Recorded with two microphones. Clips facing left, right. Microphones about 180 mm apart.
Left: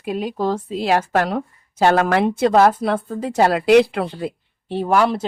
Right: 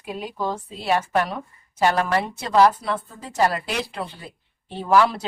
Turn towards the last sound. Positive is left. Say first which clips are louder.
# left 2 dB
turn(degrees=65)  # may be behind; listen again after turning